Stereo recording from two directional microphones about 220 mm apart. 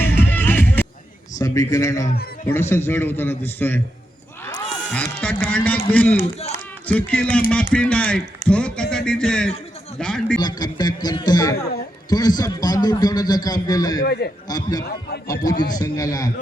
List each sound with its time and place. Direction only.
0.3 s music: 10° left (ahead or behind)
1.4 s a man's voice: 15° left (ahead or behind)
4.9 s a man's voice: 5° left (ahead or behind)
10.3 s a man's voice: 20° left (ahead or behind)
14.0 s a man's voice: 45° left (ahead or behind)
14.4 s a man's voice: 15° left (ahead or behind)